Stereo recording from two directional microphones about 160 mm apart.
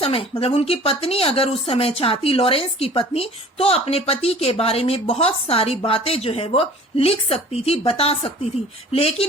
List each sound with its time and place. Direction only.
0.0 s speech: 35° left (ahead or behind)